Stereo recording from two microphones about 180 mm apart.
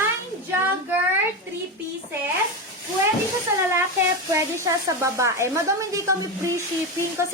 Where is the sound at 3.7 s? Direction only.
15° right (ahead or behind).